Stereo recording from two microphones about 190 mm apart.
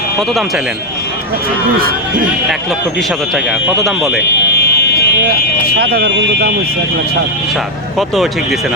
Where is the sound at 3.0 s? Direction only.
Centre (ahead or behind).